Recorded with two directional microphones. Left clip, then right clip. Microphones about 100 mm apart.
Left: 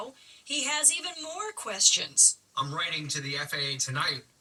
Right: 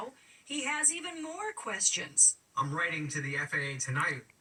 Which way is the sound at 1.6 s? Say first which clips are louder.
Left 9 dB; 30° left (ahead or behind).